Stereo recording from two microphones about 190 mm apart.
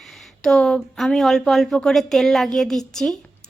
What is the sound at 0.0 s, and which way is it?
Speech, centre (ahead or behind).